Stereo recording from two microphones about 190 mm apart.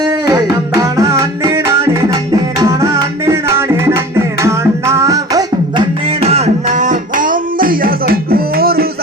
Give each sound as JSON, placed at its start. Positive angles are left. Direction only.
{"t": 0.0, "sound": "music", "side_deg": -20}